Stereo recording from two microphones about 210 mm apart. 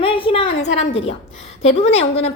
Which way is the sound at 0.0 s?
25° left (ahead or behind).